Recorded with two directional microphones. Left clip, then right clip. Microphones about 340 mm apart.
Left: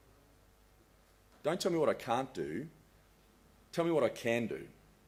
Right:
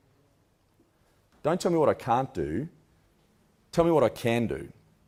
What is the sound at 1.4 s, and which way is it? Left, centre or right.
Speech, right.